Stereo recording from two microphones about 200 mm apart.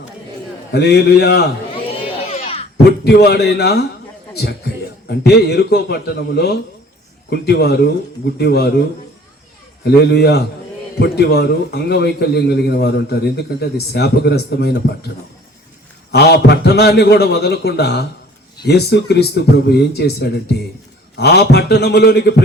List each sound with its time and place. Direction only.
0.7 s a man's voice: 55° left (ahead or behind)
2.4 s a sound: 30° left (ahead or behind)
3.0 s a man's voice: 55° left (ahead or behind)
9.8 s a man's voice: 55° left (ahead or behind)
16.1 s a man's voice: 55° left (ahead or behind)